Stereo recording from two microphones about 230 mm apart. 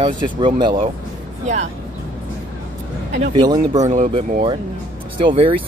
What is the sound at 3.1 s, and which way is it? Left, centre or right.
Speech, centre.